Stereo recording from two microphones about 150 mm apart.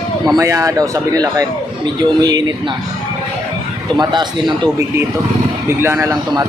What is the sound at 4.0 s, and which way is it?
Speech, 30° right (ahead or behind).